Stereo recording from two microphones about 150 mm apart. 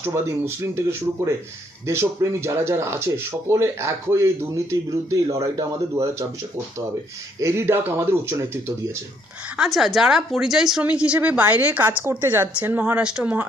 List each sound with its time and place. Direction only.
0.0 s a man's voice: 20° right (ahead or behind)
7.3 s speech: 20° right (ahead or behind)
9.6 s speech: centre (ahead or behind)